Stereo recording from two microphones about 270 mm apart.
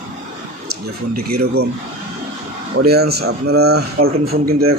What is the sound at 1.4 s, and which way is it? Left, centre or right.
Speech, right.